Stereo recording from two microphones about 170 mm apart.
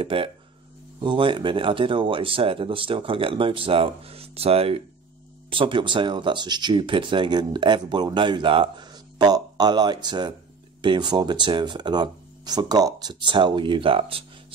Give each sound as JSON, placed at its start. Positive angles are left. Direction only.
{"t": 0.0, "sound": "speech", "side_deg": -30}